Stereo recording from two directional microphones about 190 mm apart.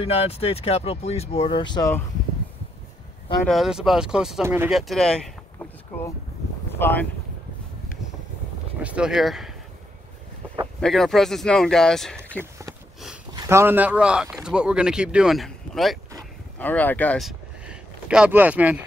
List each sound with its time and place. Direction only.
0.0 s speech: 30° left (ahead or behind)
3.4 s speech: centre (ahead or behind)
4.6 s speech: centre (ahead or behind)
6.8 s speech: 10° left (ahead or behind)
8.8 s speech: 5° right (ahead or behind)
10.8 s speech: centre (ahead or behind)
12.4 s a sound: 15° right (ahead or behind)
13.3 s speech: 15° right (ahead or behind)